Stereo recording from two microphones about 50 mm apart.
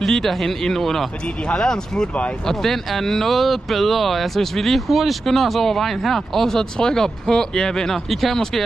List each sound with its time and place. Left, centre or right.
0.0 s speech: centre